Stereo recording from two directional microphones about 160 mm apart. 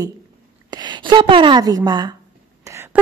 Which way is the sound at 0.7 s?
25° right (ahead or behind).